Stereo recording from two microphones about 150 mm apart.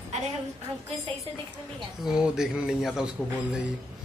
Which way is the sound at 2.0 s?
5° right (ahead or behind).